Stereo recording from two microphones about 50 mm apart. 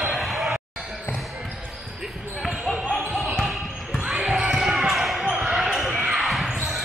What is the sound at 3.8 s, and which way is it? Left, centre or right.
Basketball bounce, centre.